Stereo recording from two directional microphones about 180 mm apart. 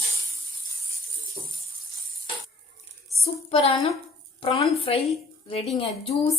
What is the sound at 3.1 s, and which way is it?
A woman's voice, 35° left (ahead or behind).